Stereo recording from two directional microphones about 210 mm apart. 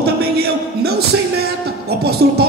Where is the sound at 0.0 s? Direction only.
50° right (ahead or behind).